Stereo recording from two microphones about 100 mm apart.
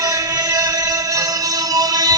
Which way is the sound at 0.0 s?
35° right (ahead or behind).